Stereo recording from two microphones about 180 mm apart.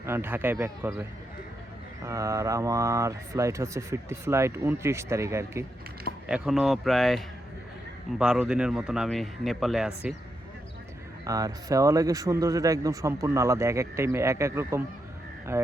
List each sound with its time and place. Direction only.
0.0 s speech: 15° right (ahead or behind)
2.0 s speech: 15° right (ahead or behind)
6.2 s speech: 5° right (ahead or behind)
11.3 s speech: 20° right (ahead or behind)